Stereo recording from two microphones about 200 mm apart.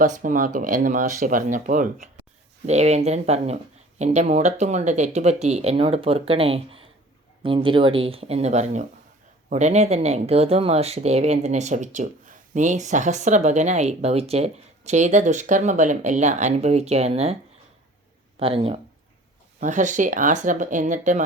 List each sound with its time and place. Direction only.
0.0 s speech: 40° right (ahead or behind)
18.3 s speech: 30° right (ahead or behind)
19.5 s speech: 40° right (ahead or behind)